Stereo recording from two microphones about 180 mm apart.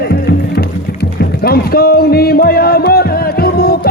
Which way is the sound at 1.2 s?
60° left (ahead or behind).